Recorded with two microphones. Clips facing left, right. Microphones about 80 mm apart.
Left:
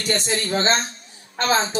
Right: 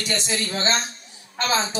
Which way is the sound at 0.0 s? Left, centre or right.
Left.